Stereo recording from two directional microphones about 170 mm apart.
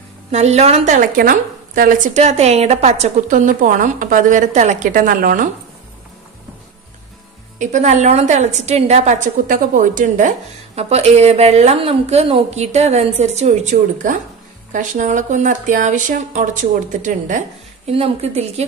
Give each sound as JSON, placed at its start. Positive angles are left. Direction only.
{"t": 0.3, "sound": "a woman's voice", "side_deg": -40}
{"t": 7.5, "sound": "a woman's voice", "side_deg": -45}
{"t": 17.9, "sound": "a woman's voice", "side_deg": -35}